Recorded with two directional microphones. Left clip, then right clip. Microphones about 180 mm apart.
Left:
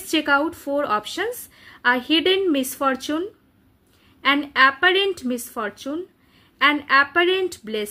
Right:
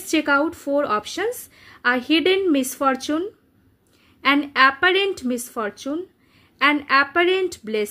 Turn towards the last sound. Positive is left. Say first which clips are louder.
# right 2 dB
turn(degrees=-20)  # may be behind; listen again after turning